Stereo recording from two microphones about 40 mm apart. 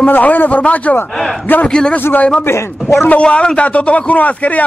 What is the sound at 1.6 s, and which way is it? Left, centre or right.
Speech, left.